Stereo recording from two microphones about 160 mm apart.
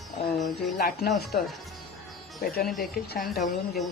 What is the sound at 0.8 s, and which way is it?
Speech, 70° left (ahead or behind).